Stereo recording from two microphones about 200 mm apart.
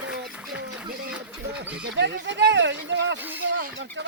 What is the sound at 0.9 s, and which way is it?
Speech, 45° right (ahead or behind).